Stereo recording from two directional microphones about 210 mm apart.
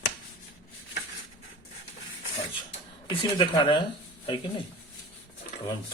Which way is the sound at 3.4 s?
25° left (ahead or behind).